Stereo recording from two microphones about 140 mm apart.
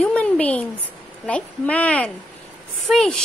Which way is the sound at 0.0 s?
5° left (ahead or behind).